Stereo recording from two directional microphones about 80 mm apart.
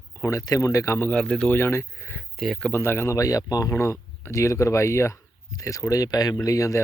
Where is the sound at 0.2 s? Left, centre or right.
Left.